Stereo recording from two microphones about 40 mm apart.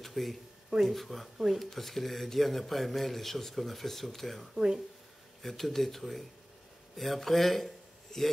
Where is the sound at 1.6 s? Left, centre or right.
Centre.